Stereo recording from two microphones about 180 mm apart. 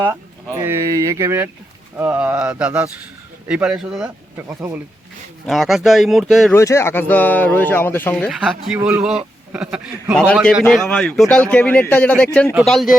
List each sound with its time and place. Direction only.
0.5 s speech: 15° right (ahead or behind)
6.5 s speech: 15° left (ahead or behind)